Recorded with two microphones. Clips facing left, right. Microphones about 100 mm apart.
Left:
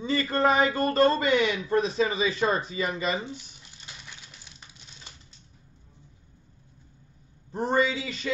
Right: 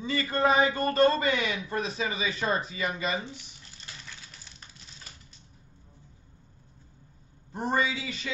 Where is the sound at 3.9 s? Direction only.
15° left (ahead or behind).